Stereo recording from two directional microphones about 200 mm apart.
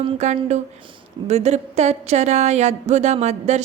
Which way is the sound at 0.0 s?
30° right (ahead or behind).